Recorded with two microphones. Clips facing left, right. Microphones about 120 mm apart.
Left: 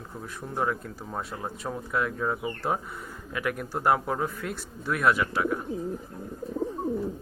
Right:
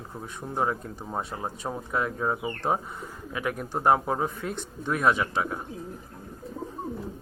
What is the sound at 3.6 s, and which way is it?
Speech, 20° right (ahead or behind).